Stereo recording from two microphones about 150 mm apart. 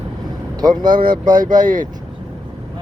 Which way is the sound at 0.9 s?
70° right (ahead or behind).